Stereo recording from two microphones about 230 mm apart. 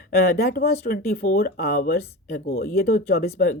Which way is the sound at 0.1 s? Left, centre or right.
Left.